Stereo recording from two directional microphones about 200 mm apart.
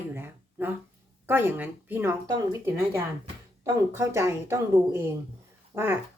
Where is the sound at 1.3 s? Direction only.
10° right (ahead or behind).